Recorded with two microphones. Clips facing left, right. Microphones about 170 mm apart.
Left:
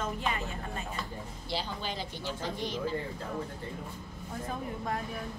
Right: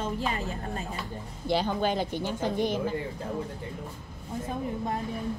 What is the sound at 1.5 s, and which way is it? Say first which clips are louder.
Speech: right 10 dB; 55° right (ahead or behind).